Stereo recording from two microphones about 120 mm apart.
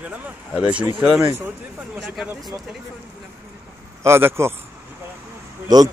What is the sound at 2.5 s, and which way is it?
Speech, 20° right (ahead or behind).